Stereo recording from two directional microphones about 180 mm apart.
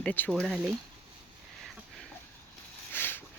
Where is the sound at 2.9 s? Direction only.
10° left (ahead or behind).